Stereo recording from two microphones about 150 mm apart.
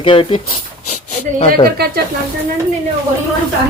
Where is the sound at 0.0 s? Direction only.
35° left (ahead or behind).